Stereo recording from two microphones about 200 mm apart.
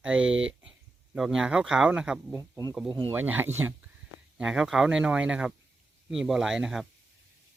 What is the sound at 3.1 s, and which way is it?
Speech, 10° right (ahead or behind).